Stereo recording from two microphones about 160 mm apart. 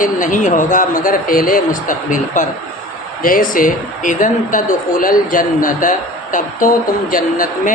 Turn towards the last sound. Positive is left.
turn(degrees=60)  # may be behind; listen again after turning